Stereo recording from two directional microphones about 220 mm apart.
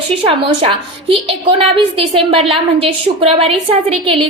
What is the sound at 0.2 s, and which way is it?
A woman's voice, 25° right (ahead or behind).